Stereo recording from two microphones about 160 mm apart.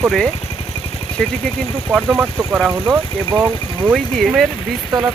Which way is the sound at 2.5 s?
5° right (ahead or behind).